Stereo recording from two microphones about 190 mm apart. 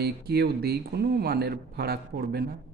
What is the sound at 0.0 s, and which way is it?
Speech, 55° right (ahead or behind).